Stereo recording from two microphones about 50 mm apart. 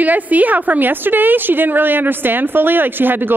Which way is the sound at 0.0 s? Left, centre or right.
Right.